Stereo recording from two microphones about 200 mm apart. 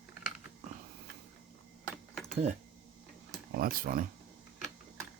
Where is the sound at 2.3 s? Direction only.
40° right (ahead or behind).